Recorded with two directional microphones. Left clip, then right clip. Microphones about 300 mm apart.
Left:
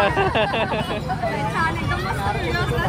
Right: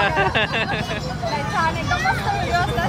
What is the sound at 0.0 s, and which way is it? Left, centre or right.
Speech, centre.